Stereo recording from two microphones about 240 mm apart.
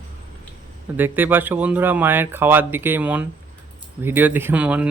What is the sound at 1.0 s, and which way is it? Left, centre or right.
Speech, centre.